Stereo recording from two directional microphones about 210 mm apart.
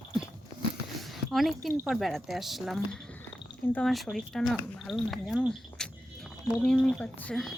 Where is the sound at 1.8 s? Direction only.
Centre (ahead or behind).